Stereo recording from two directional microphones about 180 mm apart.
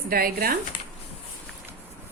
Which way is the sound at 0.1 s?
55° right (ahead or behind).